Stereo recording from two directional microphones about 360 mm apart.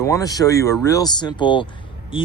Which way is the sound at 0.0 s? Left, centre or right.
Centre.